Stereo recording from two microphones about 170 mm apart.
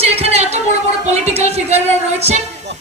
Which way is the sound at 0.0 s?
35° right (ahead or behind).